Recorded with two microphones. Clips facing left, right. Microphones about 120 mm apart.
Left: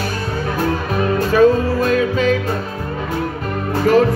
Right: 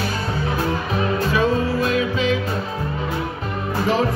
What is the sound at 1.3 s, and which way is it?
Music, 45° left (ahead or behind).